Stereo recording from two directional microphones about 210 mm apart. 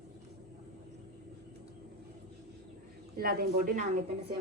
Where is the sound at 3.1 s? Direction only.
45° right (ahead or behind).